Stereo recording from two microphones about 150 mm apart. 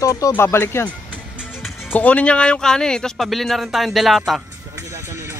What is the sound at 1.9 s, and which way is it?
Speech, 10° left (ahead or behind).